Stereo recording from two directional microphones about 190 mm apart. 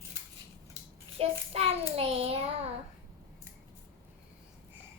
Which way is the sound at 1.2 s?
30° right (ahead or behind).